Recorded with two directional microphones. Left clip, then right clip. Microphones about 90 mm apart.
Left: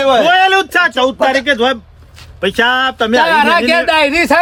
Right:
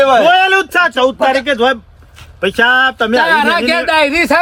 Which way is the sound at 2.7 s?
45° right (ahead or behind).